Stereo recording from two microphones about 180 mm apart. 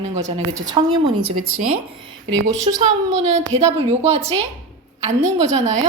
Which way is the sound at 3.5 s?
35° right (ahead or behind).